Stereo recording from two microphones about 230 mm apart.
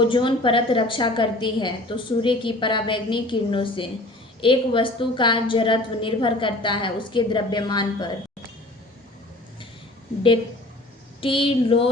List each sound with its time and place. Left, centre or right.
0.0 s a woman's voice: left
11.2 s a woman's voice: left